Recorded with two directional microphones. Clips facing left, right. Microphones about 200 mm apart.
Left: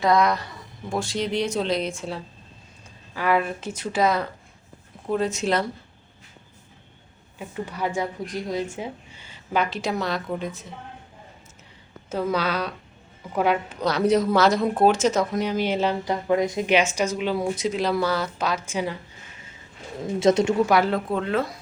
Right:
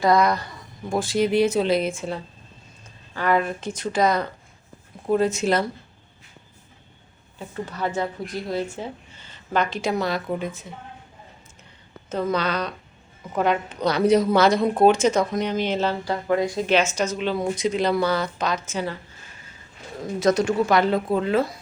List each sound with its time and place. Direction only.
0.0 s speech: centre (ahead or behind)
7.3 s a woman's voice: 15° left (ahead or behind)
12.0 s a woman's voice: 10° left (ahead or behind)
20.1 s speech: 25° left (ahead or behind)
20.7 s speech: 5° left (ahead or behind)